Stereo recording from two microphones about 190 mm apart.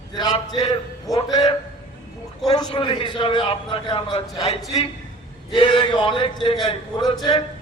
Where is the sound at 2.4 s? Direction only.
20° left (ahead or behind).